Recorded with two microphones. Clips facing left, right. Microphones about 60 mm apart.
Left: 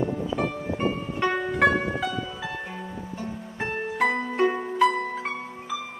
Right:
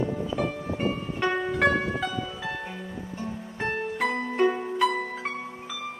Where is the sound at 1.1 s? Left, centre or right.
Centre.